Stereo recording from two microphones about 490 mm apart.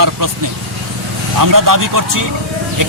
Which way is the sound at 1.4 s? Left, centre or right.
Right.